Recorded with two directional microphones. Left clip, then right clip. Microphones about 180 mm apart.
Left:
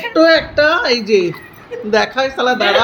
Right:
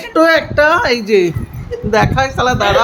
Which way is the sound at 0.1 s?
10° right (ahead or behind).